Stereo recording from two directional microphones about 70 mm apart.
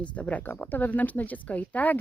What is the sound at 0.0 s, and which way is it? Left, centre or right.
Speech, centre.